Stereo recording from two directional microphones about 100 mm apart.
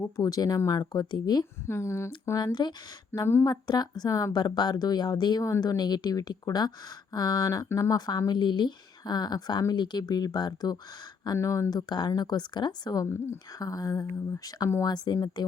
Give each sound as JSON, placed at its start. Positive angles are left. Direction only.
{"t": 0.2, "sound": "a woman's voice", "side_deg": 35}
{"t": 1.6, "sound": "speech", "side_deg": 25}
{"t": 2.4, "sound": "a woman's voice", "side_deg": 45}
{"t": 11.3, "sound": "speech", "side_deg": 30}
{"t": 13.1, "sound": "speech", "side_deg": 25}
{"t": 13.6, "sound": "a woman's voice", "side_deg": 40}